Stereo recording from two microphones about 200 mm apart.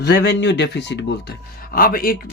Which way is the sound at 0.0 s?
60° left (ahead or behind).